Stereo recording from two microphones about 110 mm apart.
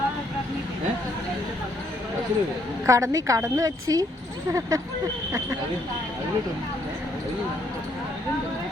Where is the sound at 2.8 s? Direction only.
30° right (ahead or behind).